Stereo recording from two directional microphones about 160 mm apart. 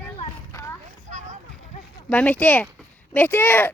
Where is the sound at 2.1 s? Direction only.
10° left (ahead or behind).